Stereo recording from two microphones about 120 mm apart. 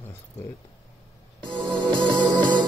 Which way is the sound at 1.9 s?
40° right (ahead or behind).